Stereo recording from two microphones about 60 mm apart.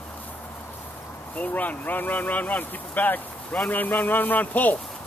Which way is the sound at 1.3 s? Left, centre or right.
Left.